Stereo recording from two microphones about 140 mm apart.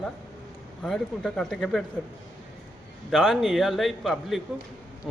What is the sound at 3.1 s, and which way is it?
Speech, centre (ahead or behind).